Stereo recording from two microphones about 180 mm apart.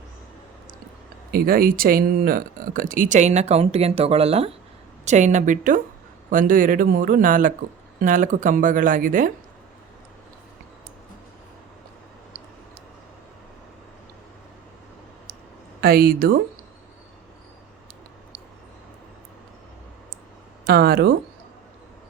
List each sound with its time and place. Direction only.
1.3 s speech: 55° right (ahead or behind)
15.8 s speech: 60° right (ahead or behind)
20.7 s speech: 60° right (ahead or behind)